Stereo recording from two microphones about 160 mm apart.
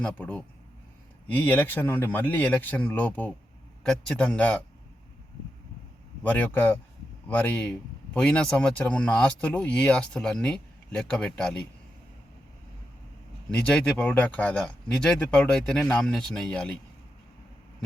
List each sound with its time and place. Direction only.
0.0 s speech: 10° left (ahead or behind)
6.2 s speech: 10° left (ahead or behind)
13.5 s speech: 5° left (ahead or behind)